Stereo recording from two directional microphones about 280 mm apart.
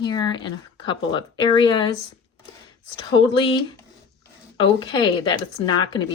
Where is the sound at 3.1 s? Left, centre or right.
Centre.